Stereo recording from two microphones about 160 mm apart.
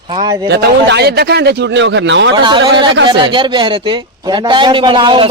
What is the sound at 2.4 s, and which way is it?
A man's voice, 30° right (ahead or behind).